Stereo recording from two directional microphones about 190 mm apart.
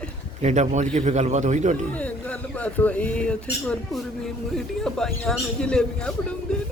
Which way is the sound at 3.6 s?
Centre (ahead or behind).